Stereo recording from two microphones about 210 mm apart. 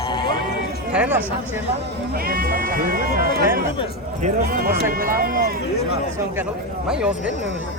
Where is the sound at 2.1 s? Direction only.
45° right (ahead or behind).